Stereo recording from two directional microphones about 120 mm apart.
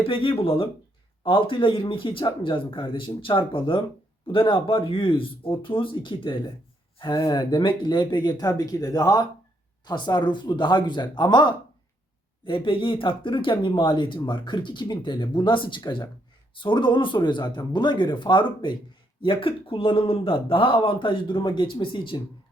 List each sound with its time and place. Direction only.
0.0 s a man's voice: 45° left (ahead or behind)